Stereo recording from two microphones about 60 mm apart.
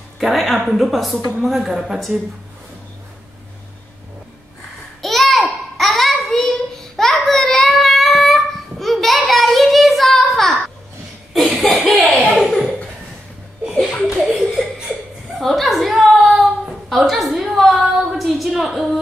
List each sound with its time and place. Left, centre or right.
0.2 s a woman's voice: centre
5.0 s a sound: centre
9.3 s child singing: centre
11.5 s chuckle: centre
12.4 s laughter: centre
14.2 s laughter: centre
15.3 s a sound: centre